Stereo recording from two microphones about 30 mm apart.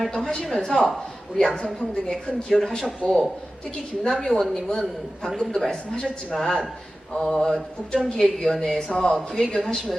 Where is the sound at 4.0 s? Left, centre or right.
Centre.